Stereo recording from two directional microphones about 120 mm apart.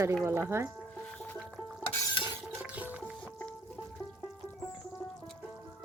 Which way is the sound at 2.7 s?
15° right (ahead or behind).